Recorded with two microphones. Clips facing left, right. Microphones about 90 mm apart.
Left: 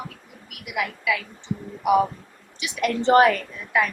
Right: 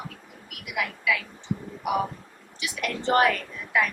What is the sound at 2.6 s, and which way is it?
Speech, 25° left (ahead or behind).